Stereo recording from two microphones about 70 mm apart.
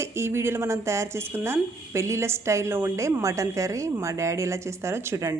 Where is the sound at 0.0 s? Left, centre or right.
Right.